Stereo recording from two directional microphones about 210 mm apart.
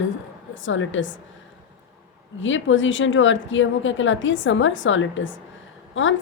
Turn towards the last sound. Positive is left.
turn(degrees=65)  # may be behind; listen again after turning